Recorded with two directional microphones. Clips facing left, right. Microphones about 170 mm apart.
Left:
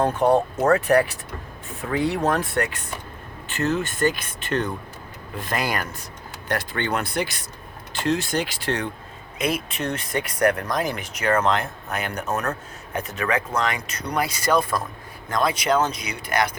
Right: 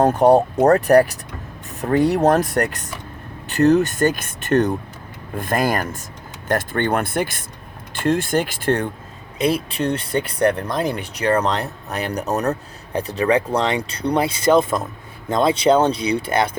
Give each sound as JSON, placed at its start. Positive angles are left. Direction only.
{"t": 0.0, "sound": "speech", "side_deg": -40}
{"t": 9.4, "sound": "speech", "side_deg": -30}